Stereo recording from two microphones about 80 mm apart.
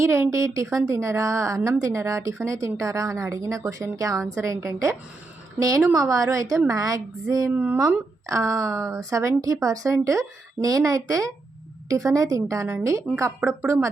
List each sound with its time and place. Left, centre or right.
0.0 s speech: right
7.5 s speech: right
7.8 s speech: right
12.6 s speech: right